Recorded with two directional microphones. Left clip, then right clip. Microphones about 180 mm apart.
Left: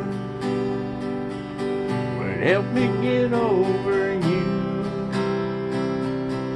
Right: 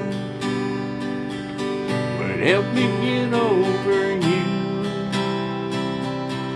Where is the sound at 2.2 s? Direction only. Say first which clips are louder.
Right 2 dB; 20° right (ahead or behind).